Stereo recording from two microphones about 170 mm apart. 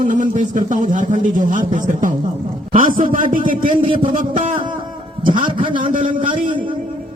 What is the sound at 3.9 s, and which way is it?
Speech, 30° right (ahead or behind).